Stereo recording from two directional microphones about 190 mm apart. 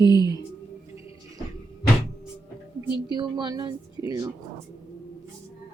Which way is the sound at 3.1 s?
25° right (ahead or behind).